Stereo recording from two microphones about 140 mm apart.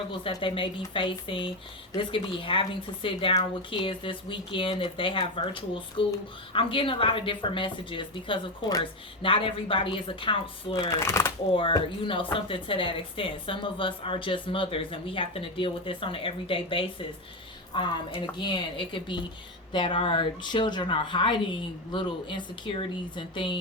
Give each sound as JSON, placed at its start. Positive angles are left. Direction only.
{"t": 0.1, "sound": "speech", "side_deg": 35}
{"t": 10.8, "sound": "speech", "side_deg": 20}
{"t": 11.5, "sound": "speech", "side_deg": 40}